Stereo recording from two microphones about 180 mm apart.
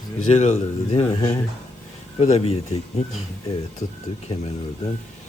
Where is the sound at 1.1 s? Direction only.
25° left (ahead or behind).